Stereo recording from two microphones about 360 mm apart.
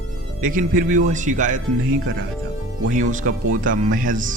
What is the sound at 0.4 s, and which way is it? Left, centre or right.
Speech, right.